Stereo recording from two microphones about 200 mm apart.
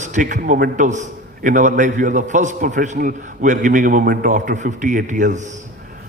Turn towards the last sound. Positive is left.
turn(degrees=-35)  # may be behind; listen again after turning